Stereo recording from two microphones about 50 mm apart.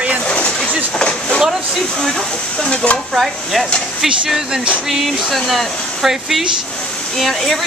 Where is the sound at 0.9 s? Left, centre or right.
Centre.